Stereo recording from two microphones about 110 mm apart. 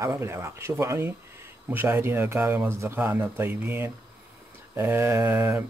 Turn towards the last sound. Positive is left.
turn(degrees=-20)  # may be behind; listen again after turning